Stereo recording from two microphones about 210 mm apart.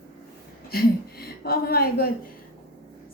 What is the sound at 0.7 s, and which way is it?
A woman's voice, 45° left (ahead or behind).